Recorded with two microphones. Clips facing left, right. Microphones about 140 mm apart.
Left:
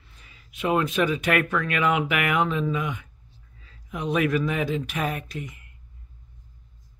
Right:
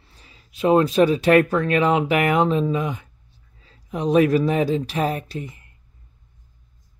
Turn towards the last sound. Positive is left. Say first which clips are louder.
# right 4 dB
turn(degrees=-30)  # may be behind; listen again after turning